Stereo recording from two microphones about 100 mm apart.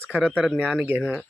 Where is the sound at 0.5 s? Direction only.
10° right (ahead or behind).